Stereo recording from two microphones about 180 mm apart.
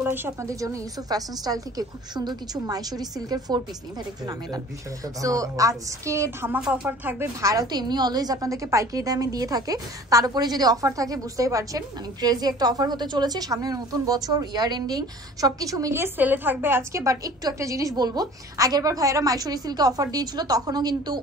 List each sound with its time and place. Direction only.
0.0 s a woman's voice: 10° right (ahead or behind)
5.0 s a woman's voice: 20° right (ahead or behind)